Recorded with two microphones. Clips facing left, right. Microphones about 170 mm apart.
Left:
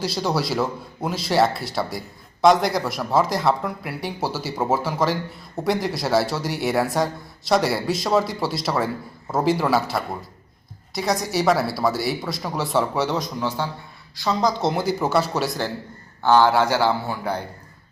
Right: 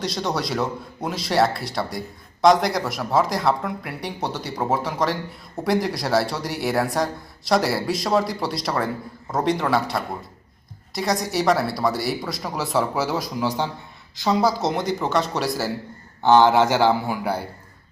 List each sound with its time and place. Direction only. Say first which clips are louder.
0.0 s speech: left 2 dB; 5° left (ahead or behind)
14.2 s a man's voice: right 2 dB; 15° right (ahead or behind)
14.5 s speech: left 1 dB; centre (ahead or behind)
16.2 s a man's voice: right 1 dB; 20° right (ahead or behind)